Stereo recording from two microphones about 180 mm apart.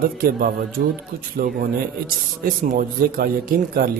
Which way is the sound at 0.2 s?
55° right (ahead or behind).